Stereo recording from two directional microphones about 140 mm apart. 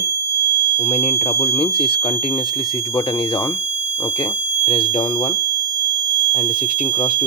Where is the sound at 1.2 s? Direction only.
45° left (ahead or behind).